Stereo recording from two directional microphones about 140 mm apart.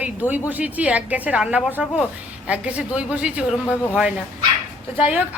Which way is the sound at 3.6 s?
15° left (ahead or behind).